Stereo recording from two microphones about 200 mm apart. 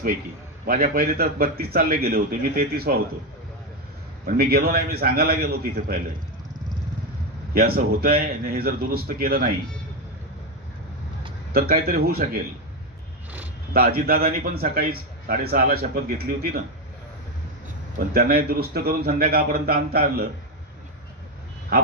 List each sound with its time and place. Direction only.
0.7 s a man's voice: 45° right (ahead or behind)
4.3 s a man's voice: 50° right (ahead or behind)
7.5 s a man's voice: 50° right (ahead or behind)
11.5 s a man's voice: 50° right (ahead or behind)
13.7 s a man's voice: 50° right (ahead or behind)
17.9 s a man's voice: 50° right (ahead or behind)
21.7 s a man's voice: 45° right (ahead or behind)